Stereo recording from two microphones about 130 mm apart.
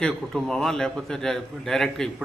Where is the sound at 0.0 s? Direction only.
Centre (ahead or behind).